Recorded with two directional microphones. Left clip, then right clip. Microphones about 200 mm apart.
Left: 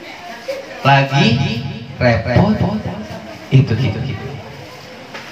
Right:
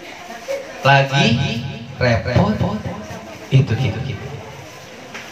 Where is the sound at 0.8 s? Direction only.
25° right (ahead or behind).